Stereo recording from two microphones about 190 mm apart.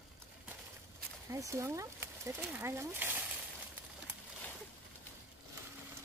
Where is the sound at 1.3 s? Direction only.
15° right (ahead or behind).